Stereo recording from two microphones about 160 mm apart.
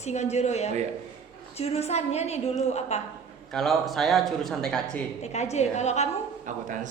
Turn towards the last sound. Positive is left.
turn(degrees=-55)  # may be behind; listen again after turning